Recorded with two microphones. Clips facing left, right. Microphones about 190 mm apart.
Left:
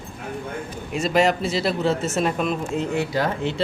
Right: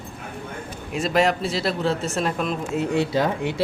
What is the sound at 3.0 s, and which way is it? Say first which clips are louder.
Speech: right 1 dB; 25° right (ahead or behind).